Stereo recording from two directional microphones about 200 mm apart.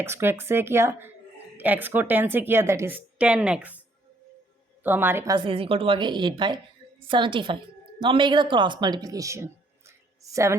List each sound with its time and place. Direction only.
0.0 s a woman's voice: 10° right (ahead or behind)
4.8 s a woman's voice: 10° right (ahead or behind)